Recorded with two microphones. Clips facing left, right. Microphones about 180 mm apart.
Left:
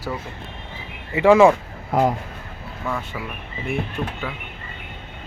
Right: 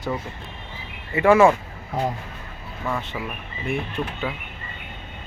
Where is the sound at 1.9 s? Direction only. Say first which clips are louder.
Left 6 dB; 90° left.